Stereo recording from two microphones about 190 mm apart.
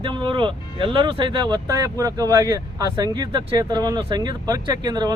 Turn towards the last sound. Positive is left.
turn(degrees=-20)  # may be behind; listen again after turning